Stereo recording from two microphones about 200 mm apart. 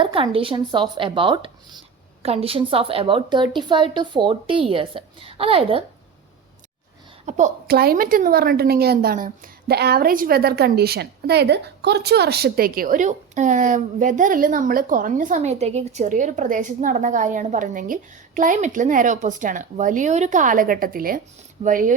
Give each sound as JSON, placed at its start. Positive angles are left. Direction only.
{"t": 0.0, "sound": "a woman's voice", "side_deg": -25}
{"t": 7.3, "sound": "a woman's voice", "side_deg": -40}